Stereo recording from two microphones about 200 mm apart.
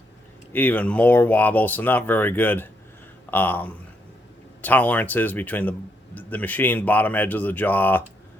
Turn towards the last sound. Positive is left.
turn(degrees=10)  # may be behind; listen again after turning